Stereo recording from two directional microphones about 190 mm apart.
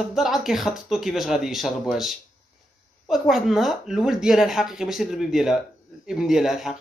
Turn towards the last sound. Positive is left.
turn(degrees=0)  # may be behind; listen again after turning